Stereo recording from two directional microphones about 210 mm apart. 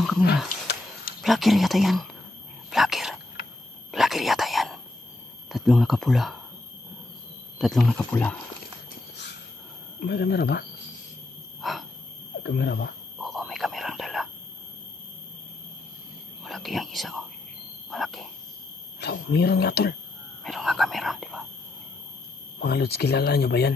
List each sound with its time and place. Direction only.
1.2 s speech: centre (ahead or behind)
2.7 s whispering: centre (ahead or behind)
5.5 s speech: centre (ahead or behind)
7.5 s speech: centre (ahead or behind)
9.9 s speech: 50° left (ahead or behind)
11.6 s a sound: centre (ahead or behind)
12.4 s speech: 55° left (ahead or behind)
13.2 s whispering: centre (ahead or behind)
16.4 s speech: centre (ahead or behind)
17.9 s a sound: centre (ahead or behind)
18.9 s speech: 50° left (ahead or behind)
20.4 s speech: centre (ahead or behind)
22.6 s speech: 50° left (ahead or behind)